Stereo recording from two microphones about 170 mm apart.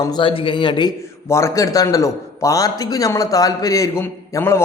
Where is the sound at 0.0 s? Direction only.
25° left (ahead or behind).